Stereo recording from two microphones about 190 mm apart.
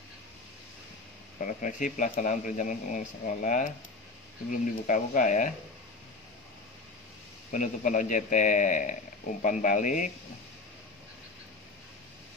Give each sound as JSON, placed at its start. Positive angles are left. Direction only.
{"t": 1.4, "sound": "a man's voice", "side_deg": 40}
{"t": 7.5, "sound": "a man's voice", "side_deg": 45}